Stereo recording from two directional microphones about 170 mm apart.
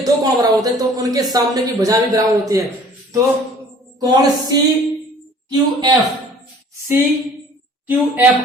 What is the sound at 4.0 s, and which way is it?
Speech, 20° right (ahead or behind).